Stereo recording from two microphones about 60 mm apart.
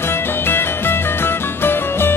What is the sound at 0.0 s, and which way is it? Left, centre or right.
Music, left.